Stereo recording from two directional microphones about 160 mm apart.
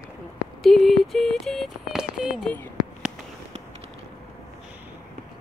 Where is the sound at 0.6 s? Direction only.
Centre (ahead or behind).